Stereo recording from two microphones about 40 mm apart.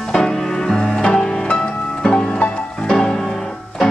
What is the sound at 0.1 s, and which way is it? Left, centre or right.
Music, centre.